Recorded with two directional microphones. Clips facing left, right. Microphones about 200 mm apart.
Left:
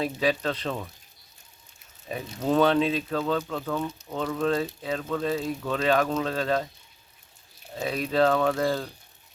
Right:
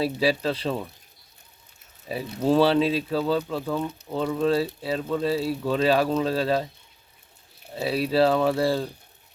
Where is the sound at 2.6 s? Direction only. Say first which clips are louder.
Right 1 dB; 30° right (ahead or behind).